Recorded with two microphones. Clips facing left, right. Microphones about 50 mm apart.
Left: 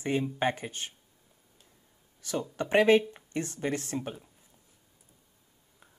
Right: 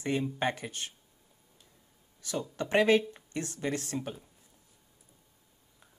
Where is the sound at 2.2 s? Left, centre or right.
Left.